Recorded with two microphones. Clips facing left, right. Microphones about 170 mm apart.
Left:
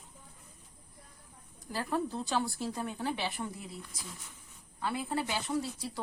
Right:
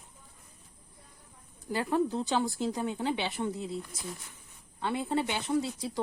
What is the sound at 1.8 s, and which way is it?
A woman's voice, 15° right (ahead or behind).